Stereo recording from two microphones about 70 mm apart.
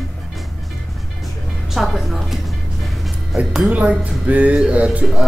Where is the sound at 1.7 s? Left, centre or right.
Centre.